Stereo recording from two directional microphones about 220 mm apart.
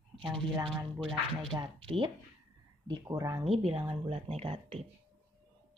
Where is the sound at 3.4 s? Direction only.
25° right (ahead or behind).